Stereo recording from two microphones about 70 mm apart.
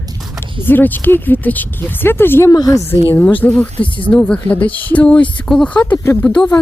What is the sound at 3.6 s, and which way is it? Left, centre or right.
Speech, left.